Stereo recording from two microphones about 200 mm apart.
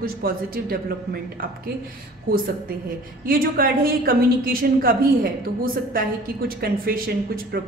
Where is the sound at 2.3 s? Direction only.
45° right (ahead or behind).